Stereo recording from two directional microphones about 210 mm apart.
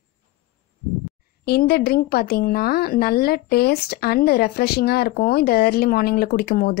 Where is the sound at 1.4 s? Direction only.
45° left (ahead or behind).